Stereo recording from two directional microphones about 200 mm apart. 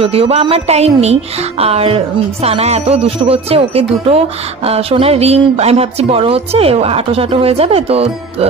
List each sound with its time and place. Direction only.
0.0 s a woman's voice: 30° right (ahead or behind)